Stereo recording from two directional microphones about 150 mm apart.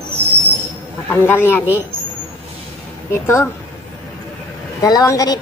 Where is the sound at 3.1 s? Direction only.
15° left (ahead or behind).